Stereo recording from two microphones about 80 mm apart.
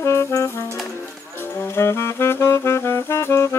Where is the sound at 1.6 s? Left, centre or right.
Left.